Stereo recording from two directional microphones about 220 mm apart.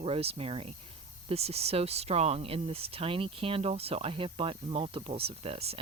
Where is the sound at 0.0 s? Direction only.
25° right (ahead or behind).